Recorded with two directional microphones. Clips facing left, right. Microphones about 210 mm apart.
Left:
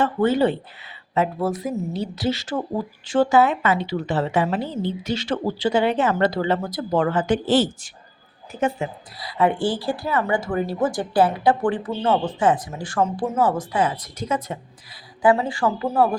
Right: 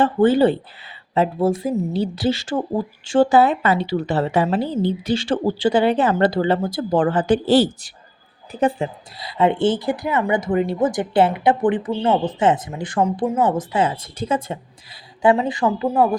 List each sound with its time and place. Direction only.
0.0 s a woman's voice: 30° right (ahead or behind); by 13.4 s 10° right (ahead or behind)
13.5 s a woman's voice: 25° right (ahead or behind)